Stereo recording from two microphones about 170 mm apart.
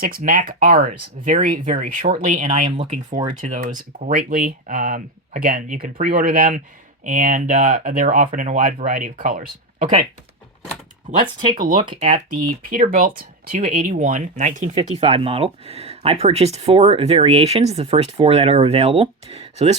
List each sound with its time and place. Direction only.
0.0 s speech: 55° right (ahead or behind)
2.6 s speech: 30° right (ahead or behind)
3.2 s speech: 50° right (ahead or behind)
11.2 s speech: 25° right (ahead or behind)
12.3 s speech: 60° right (ahead or behind); by 19.7 s 35° right (ahead or behind)